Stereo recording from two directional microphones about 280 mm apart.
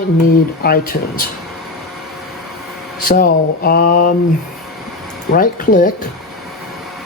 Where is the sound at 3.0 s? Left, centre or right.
Left.